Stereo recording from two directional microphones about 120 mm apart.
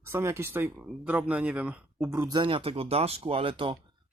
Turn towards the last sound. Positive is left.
turn(degrees=-45)  # may be behind; listen again after turning